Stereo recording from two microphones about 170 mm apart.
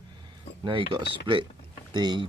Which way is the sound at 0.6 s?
30° right (ahead or behind).